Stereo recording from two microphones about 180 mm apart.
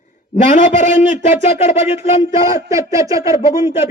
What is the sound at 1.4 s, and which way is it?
Speech, 35° left (ahead or behind).